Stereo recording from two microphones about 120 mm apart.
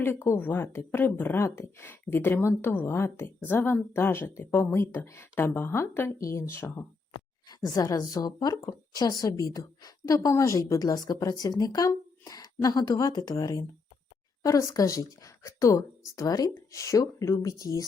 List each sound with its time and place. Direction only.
0.0 s speech: 20° left (ahead or behind)
7.4 s a woman's voice: 30° left (ahead or behind)